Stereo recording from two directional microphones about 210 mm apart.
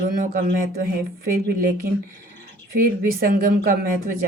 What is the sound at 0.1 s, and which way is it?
Speech, 45° right (ahead or behind).